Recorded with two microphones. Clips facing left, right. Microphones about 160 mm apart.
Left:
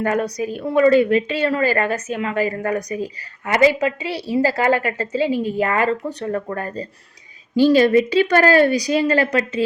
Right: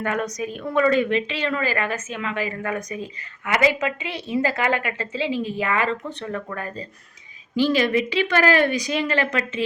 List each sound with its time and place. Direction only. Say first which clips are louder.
0.0 s a woman's voice: left 5 dB; 35° left (ahead or behind)